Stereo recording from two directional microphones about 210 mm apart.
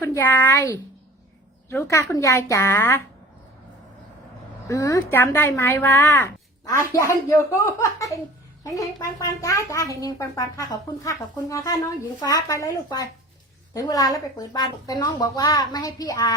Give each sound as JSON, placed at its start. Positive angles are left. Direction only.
{"t": 0.0, "sound": "speech", "side_deg": 10}
{"t": 4.7, "sound": "speech", "side_deg": 15}